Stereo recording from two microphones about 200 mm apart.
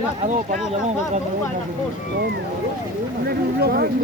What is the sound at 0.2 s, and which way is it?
Speech, 35° right (ahead or behind).